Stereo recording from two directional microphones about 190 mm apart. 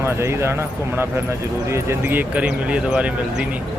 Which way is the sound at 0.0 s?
15° right (ahead or behind).